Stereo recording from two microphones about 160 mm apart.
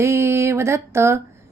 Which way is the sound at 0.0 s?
15° right (ahead or behind).